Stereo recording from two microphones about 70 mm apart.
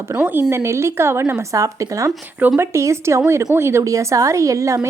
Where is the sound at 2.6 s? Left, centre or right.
Right.